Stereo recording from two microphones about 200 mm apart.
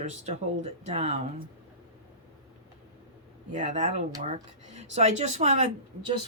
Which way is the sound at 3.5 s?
35° right (ahead or behind).